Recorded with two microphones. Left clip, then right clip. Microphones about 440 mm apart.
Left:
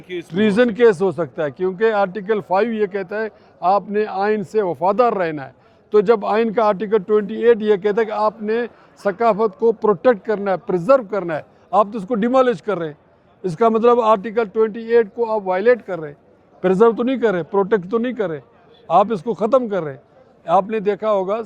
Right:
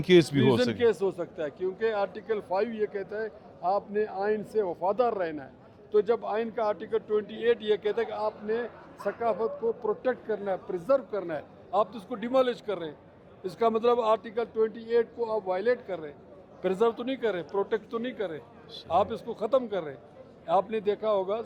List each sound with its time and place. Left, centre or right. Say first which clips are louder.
0.3 s speech: left 9 dB; left